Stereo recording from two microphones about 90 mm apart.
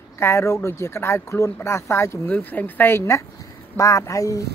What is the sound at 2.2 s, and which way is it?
Speech, 20° left (ahead or behind).